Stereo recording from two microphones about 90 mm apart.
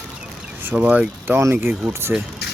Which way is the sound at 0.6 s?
20° right (ahead or behind).